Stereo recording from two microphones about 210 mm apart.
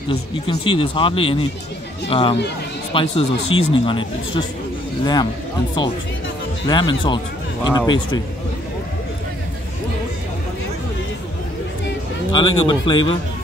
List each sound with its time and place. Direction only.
0.1 s speech: 25° left (ahead or behind)
6.7 s speech: 20° left (ahead or behind)
12.3 s speech: 20° left (ahead or behind)